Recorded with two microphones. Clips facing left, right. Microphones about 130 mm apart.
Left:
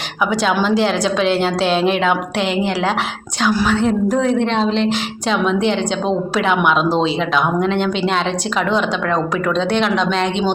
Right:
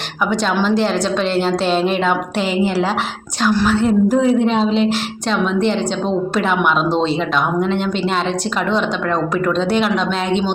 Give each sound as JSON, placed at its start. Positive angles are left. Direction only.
{"t": 0.3, "sound": "a woman's voice", "side_deg": 0}
{"t": 3.7, "sound": "a woman's voice", "side_deg": -5}
{"t": 9.6, "sound": "a woman's voice", "side_deg": -5}